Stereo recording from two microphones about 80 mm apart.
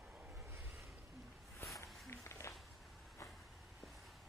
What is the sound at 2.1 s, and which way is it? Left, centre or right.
Run, left.